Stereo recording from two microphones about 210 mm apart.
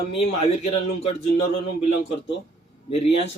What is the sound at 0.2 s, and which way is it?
Speech, 30° left (ahead or behind).